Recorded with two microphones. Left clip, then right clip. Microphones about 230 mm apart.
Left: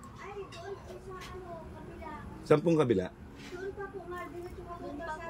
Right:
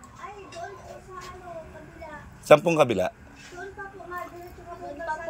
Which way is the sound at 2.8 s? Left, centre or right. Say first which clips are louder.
Right 7 dB; right.